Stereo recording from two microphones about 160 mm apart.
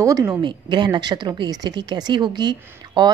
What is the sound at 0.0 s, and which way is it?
A woman's voice, 20° right (ahead or behind).